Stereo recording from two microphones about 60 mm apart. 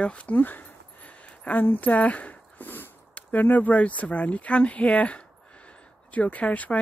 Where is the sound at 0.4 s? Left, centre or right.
Left.